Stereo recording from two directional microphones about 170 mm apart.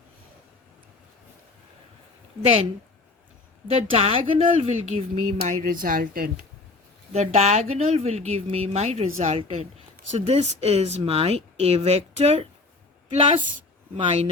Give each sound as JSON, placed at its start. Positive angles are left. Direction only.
{"t": 2.4, "sound": "speech", "side_deg": -35}
{"t": 3.7, "sound": "speech", "side_deg": -35}
{"t": 5.6, "sound": "speech", "side_deg": -55}
{"t": 7.1, "sound": "speech", "side_deg": -40}